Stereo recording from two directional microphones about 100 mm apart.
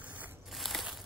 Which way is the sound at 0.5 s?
Centre (ahead or behind).